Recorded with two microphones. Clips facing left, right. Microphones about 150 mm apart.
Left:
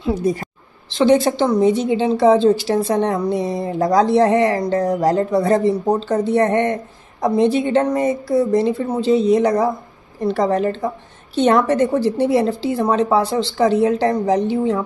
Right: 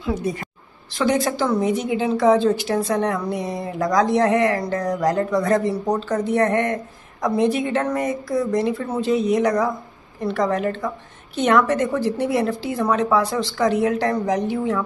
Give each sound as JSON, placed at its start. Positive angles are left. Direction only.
{"t": 0.0, "sound": "a woman's voice", "side_deg": 35}